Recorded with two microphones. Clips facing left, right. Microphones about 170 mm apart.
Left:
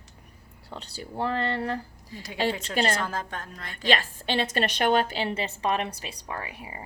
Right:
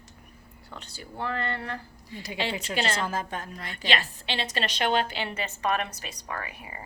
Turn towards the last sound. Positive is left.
turn(degrees=25)  # may be behind; listen again after turning